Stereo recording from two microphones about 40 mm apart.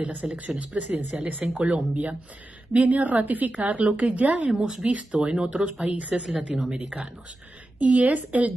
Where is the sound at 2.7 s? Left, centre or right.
Right.